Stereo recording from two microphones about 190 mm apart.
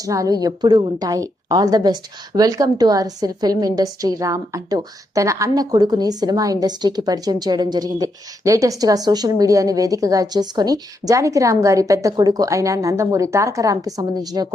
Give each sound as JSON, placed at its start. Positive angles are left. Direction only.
{"t": 0.0, "sound": "a woman's voice", "side_deg": -15}